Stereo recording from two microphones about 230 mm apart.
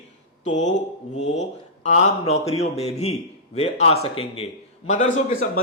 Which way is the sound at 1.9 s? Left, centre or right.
Left.